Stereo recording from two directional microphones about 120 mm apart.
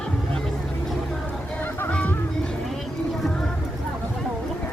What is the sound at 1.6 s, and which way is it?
Music, 15° left (ahead or behind).